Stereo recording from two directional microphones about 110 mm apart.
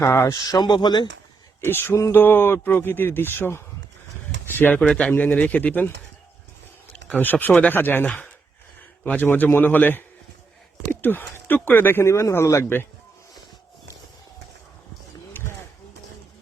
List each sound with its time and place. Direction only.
0.0 s a man's voice: 25° left (ahead or behind)
0.3 s speech: 35° left (ahead or behind)
1.6 s a man's voice: 20° left (ahead or behind)
6.9 s speech: 15° left (ahead or behind)
11.0 s a man's voice: 20° left (ahead or behind)
15.3 s a sound: 20° left (ahead or behind)